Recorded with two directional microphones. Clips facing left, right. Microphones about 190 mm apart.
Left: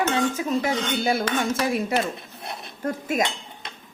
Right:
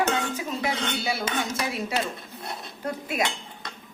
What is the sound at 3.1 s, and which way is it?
Speech, 45° left (ahead or behind).